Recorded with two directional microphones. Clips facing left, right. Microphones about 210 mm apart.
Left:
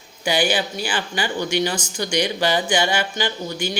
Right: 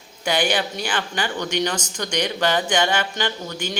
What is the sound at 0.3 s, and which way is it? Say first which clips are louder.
Speech: left 1 dB; 5° left (ahead or behind).